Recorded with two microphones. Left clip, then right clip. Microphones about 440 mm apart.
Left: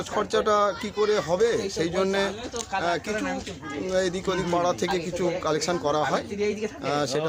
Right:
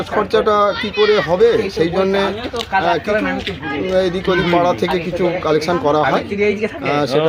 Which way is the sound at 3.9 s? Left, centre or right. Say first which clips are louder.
Right 9 dB; left.